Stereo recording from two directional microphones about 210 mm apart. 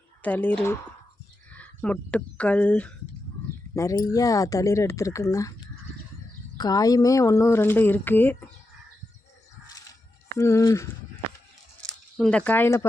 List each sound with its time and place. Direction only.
0.2 s speech: 5° left (ahead or behind)
6.6 s speech: 20° left (ahead or behind)
10.3 s speech: 15° left (ahead or behind)
11.8 s speech: 5° left (ahead or behind)